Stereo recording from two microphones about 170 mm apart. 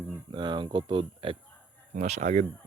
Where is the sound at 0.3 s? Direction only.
25° right (ahead or behind).